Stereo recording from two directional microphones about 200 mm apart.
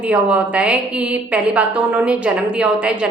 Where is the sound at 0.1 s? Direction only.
5° right (ahead or behind).